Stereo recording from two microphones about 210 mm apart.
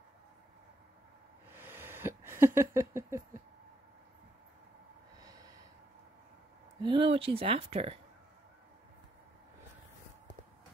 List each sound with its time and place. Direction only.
1.5 s a sound: 10° right (ahead or behind)
5.2 s snort: 20° right (ahead or behind)
6.8 s speech: 20° right (ahead or behind)